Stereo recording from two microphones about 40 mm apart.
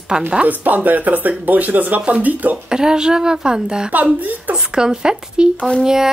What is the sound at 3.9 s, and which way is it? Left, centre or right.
Speech, right.